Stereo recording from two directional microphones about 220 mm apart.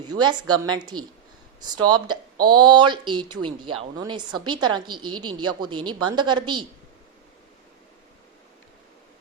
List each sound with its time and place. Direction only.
0.1 s a woman's voice: 20° right (ahead or behind)